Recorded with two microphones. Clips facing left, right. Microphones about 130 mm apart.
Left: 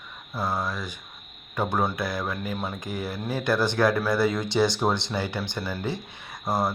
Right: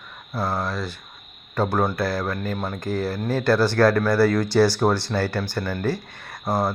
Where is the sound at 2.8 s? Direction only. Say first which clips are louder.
Right 6 dB; 15° left (ahead or behind).